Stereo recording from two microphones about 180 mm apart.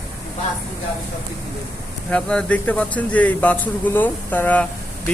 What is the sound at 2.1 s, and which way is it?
Speech, 5° left (ahead or behind).